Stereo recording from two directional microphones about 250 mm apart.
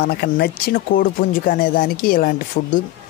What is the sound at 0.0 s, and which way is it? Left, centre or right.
Speech, left.